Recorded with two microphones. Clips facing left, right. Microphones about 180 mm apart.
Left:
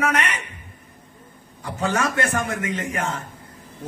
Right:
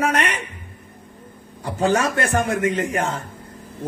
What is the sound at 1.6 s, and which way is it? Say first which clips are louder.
A man's voice: right 4 dB; 35° right (ahead or behind).